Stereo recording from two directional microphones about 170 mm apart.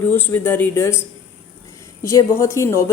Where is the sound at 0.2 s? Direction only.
15° left (ahead or behind).